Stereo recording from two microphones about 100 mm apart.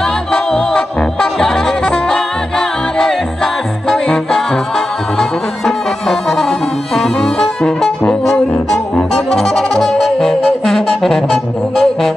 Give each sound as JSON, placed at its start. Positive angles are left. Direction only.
{"t": 0.3, "sound": "music", "side_deg": 5}
{"t": 3.9, "sound": "music", "side_deg": 5}
{"t": 7.0, "sound": "brass instrument", "side_deg": 5}
{"t": 8.0, "sound": "music", "side_deg": 15}
{"t": 8.9, "sound": "music", "side_deg": 5}